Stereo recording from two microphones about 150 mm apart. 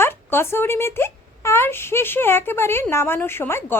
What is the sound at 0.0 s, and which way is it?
A woman's voice, 15° left (ahead or behind).